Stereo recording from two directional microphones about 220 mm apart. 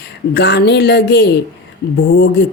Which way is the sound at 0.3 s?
50° left (ahead or behind).